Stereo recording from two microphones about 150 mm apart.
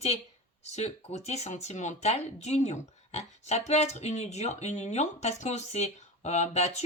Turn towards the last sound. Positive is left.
turn(degrees=45)  # may be behind; listen again after turning